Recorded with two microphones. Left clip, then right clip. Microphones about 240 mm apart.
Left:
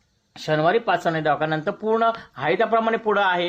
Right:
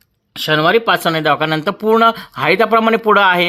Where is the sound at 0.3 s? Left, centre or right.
Right.